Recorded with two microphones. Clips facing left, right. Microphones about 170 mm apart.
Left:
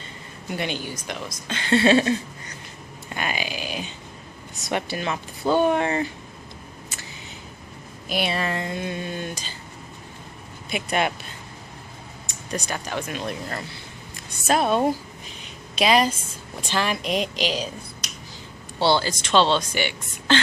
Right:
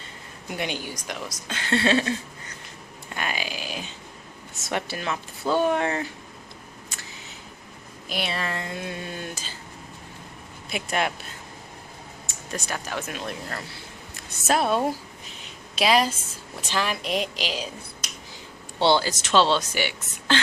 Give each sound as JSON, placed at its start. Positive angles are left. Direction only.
{"t": 0.5, "sound": "speech", "side_deg": -10}
{"t": 1.8, "sound": "a sound", "side_deg": 20}
{"t": 3.2, "sound": "a sound", "side_deg": 0}
{"t": 4.5, "sound": "speech", "side_deg": 0}
{"t": 6.9, "sound": "a sound", "side_deg": 5}
{"t": 8.1, "sound": "speech", "side_deg": 10}
{"t": 10.7, "sound": "speech", "side_deg": 0}
{"t": 12.3, "sound": "a woman's voice", "side_deg": 0}
{"t": 18.8, "sound": "speech", "side_deg": -20}
{"t": 19.0, "sound": "speech", "side_deg": -5}